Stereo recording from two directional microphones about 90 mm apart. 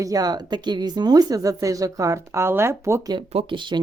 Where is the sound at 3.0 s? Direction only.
60° right (ahead or behind).